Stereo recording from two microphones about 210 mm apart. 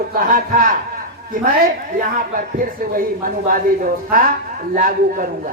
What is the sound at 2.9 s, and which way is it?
A man's voice, 40° right (ahead or behind).